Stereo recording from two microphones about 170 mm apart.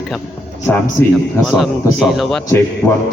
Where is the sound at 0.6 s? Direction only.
15° left (ahead or behind).